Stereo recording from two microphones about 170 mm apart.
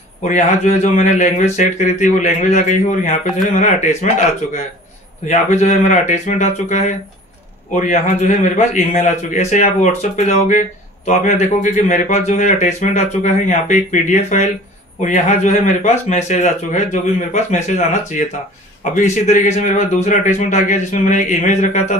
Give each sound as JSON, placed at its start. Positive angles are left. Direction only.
{"t": 0.2, "sound": "a man's voice", "side_deg": 45}